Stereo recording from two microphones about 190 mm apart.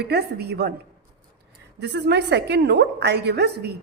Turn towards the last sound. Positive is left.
turn(degrees=-60)  # may be behind; listen again after turning